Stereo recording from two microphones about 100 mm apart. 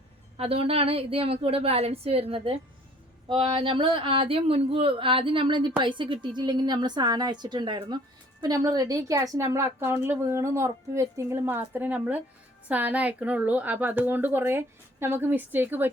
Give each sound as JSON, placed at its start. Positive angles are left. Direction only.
{"t": 0.3, "sound": "a woman's voice", "side_deg": -75}
{"t": 3.2, "sound": "a woman's voice", "side_deg": -55}